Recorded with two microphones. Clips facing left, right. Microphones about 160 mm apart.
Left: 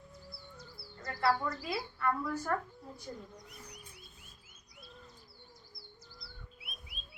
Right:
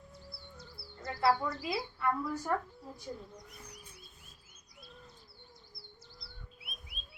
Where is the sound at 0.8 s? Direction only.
20° left (ahead or behind).